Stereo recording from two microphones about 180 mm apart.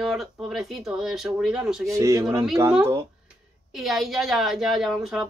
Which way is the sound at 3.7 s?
Centre (ahead or behind).